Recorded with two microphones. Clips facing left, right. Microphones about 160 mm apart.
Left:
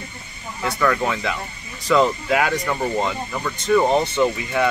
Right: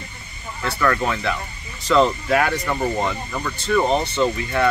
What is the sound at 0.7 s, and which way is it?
Speech, 15° left (ahead or behind).